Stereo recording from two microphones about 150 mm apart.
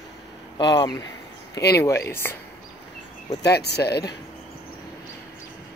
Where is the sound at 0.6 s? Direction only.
30° left (ahead or behind).